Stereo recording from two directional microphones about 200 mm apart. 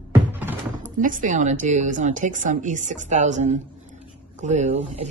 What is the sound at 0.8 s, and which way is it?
Speech, 40° right (ahead or behind).